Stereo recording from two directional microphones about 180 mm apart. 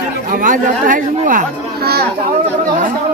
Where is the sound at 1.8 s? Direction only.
60° right (ahead or behind).